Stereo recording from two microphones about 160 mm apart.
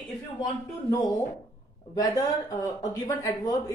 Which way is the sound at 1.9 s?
25° left (ahead or behind).